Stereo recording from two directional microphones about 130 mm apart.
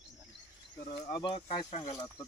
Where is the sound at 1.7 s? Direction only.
55° left (ahead or behind).